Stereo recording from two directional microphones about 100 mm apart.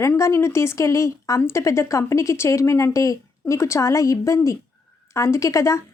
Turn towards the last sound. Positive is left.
turn(degrees=30)  # may be behind; listen again after turning